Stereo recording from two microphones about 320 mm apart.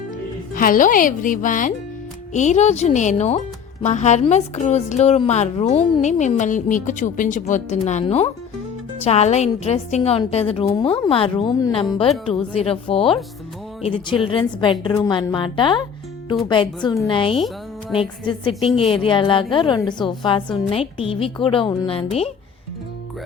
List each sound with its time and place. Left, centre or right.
0.5 s a woman's voice: left